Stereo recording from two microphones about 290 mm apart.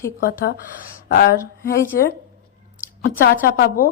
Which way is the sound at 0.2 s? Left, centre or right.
Left.